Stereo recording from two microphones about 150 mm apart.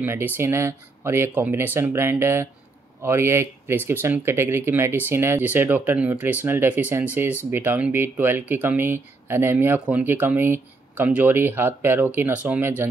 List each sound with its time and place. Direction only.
0.0 s speech: 15° right (ahead or behind)